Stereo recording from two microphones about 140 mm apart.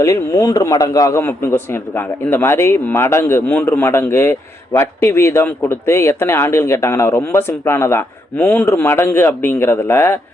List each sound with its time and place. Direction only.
0.0 s a man's voice: 25° left (ahead or behind)